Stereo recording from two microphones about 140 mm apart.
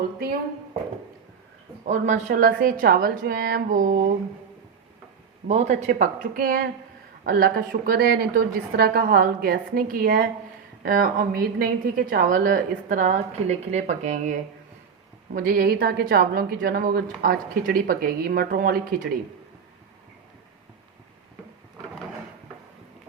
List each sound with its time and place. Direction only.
1.8 s a woman's voice: 60° right (ahead or behind)
5.5 s a woman's voice: 55° right (ahead or behind)
15.3 s a woman's voice: 90° right